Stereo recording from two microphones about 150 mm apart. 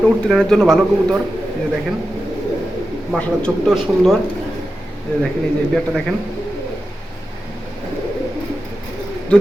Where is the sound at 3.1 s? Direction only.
5° left (ahead or behind).